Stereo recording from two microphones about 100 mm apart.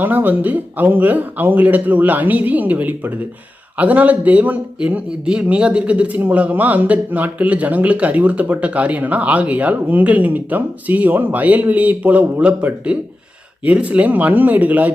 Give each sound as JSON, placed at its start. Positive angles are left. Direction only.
{"t": 0.0, "sound": "speech", "side_deg": -20}